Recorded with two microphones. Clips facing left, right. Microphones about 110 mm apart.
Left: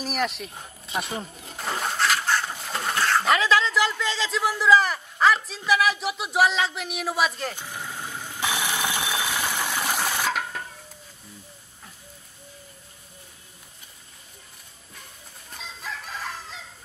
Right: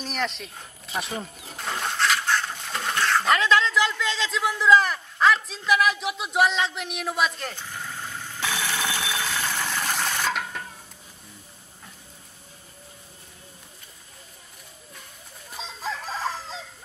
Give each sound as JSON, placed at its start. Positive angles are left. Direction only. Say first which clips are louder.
{"t": 0.0, "sound": "speech", "louder": "left 2 dB", "side_deg": 5}
{"t": 1.4, "sound": "toilet flush", "louder": "left 3 dB", "side_deg": 0}
{"t": 7.5, "sound": "alarm", "louder": "left 1 dB", "side_deg": 15}
{"t": 15.5, "sound": "crowing", "louder": "right 5 dB", "side_deg": -30}